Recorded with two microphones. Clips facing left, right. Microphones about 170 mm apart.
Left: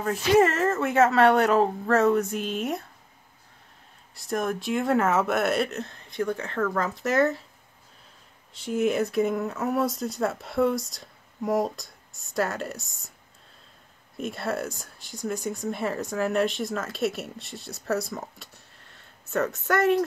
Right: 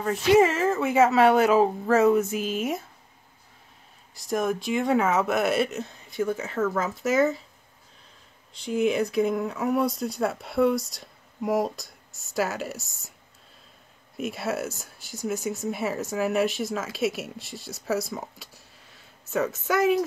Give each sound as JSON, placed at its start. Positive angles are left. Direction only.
{"t": 0.0, "sound": "speech", "side_deg": 0}
{"t": 4.1, "sound": "speech", "side_deg": 0}
{"t": 8.5, "sound": "speech", "side_deg": 5}
{"t": 14.1, "sound": "speech", "side_deg": -5}